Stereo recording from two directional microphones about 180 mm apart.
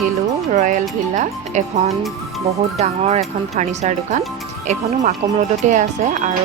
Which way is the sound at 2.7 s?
35° right (ahead or behind).